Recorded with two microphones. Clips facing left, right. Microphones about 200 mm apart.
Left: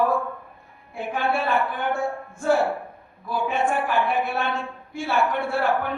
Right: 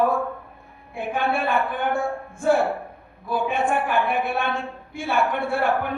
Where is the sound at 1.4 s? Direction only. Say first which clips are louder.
Right 1 dB; 55° right (ahead or behind).